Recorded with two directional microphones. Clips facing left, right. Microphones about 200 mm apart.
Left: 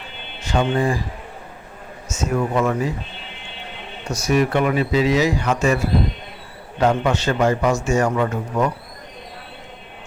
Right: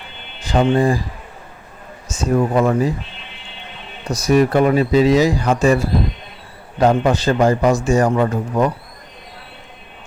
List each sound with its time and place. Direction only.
0.4 s speech: 35° right (ahead or behind)
2.1 s a man's voice: 35° right (ahead or behind)
4.1 s a man's voice: 35° right (ahead or behind)